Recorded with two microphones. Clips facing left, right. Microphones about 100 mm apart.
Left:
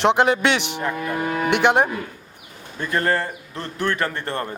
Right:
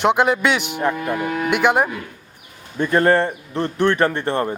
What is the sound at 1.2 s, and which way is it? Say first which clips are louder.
Speech: right 1 dB; 35° left (ahead or behind).